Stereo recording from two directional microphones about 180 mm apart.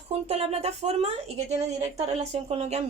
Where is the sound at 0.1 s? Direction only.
35° right (ahead or behind).